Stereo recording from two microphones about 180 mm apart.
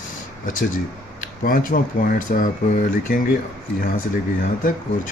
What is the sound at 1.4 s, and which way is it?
Speech, 50° left (ahead or behind).